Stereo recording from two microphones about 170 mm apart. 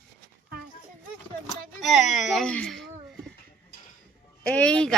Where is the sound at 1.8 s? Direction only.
Centre (ahead or behind).